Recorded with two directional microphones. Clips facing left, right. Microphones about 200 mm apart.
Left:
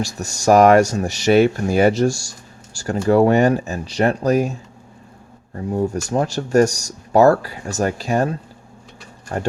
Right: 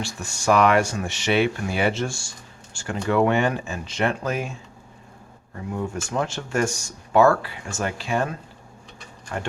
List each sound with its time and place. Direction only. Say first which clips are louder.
0.0 s speech: left 6 dB; 40° left (ahead or behind)
5.5 s speech: left 8 dB; 35° left (ahead or behind)